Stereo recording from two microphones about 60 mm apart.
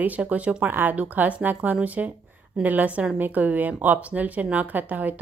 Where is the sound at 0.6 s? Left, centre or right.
Right.